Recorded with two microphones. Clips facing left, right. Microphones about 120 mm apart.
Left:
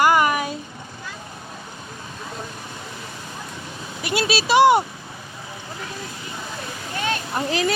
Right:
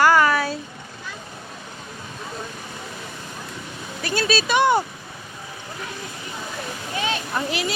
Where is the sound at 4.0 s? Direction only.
20° left (ahead or behind).